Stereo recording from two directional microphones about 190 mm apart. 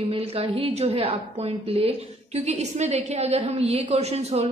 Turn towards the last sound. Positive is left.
turn(degrees=-35)  # may be behind; listen again after turning